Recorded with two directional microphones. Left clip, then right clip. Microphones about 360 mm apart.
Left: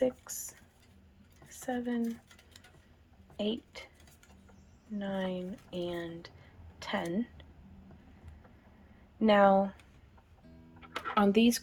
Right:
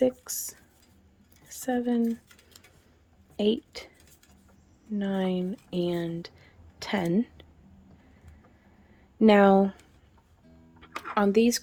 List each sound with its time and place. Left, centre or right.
0.0 s speech: right
1.6 s speech: right
3.3 s a woman's voice: right
4.9 s speech: right
9.1 s speech: right
10.8 s a sound: centre